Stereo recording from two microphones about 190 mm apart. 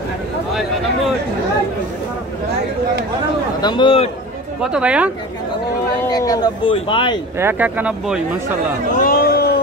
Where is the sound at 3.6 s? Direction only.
25° left (ahead or behind).